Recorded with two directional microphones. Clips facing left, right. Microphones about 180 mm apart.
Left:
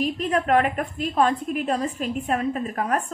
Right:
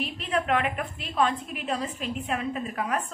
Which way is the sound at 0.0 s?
45° left (ahead or behind).